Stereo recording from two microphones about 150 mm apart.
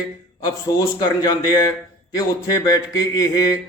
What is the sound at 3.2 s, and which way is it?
Speech, 20° left (ahead or behind).